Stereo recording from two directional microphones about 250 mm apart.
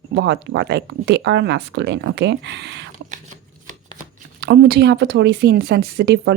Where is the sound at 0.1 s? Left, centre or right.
Right.